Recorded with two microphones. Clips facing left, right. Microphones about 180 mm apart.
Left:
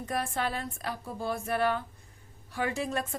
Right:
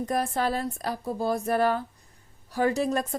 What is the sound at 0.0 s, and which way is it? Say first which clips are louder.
A woman's voice: right 5 dB; 40° right (ahead or behind).